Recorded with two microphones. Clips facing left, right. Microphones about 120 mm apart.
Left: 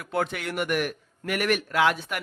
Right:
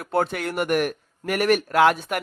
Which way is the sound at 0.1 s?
40° right (ahead or behind).